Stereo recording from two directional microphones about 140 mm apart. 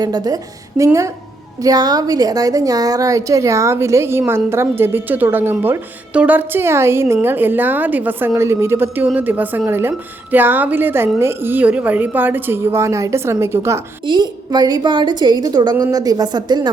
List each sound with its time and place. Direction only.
0.0 s a woman's voice: 30° right (ahead or behind)
1.6 s a woman's voice: 30° right (ahead or behind)
14.0 s a woman's voice: 35° right (ahead or behind)